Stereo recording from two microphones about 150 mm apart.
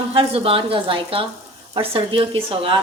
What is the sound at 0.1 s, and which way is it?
A woman's voice, 40° right (ahead or behind).